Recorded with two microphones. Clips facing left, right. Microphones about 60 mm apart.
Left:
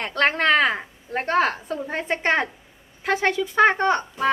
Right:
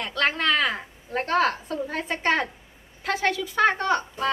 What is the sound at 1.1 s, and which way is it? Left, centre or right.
A woman's voice, left.